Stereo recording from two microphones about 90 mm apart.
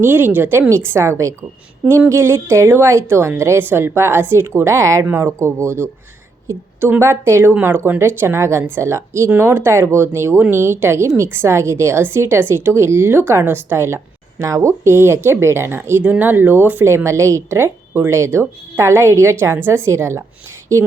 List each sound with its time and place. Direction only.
0.0 s a woman's voice: 20° right (ahead or behind)